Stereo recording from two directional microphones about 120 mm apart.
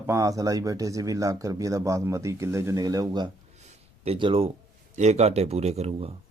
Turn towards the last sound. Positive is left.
turn(degrees=-60)  # may be behind; listen again after turning